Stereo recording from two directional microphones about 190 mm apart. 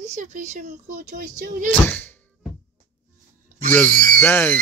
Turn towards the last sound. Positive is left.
turn(degrees=10)  # may be behind; listen again after turning